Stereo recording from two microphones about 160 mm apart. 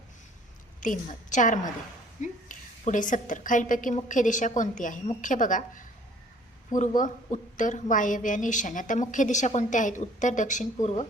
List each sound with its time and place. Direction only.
0.8 s a woman's voice: 50° left (ahead or behind)